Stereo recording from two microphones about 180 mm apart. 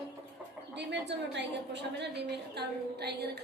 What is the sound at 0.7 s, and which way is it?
Speech, 75° right (ahead or behind).